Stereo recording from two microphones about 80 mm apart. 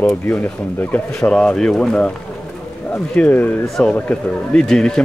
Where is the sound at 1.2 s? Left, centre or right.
Centre.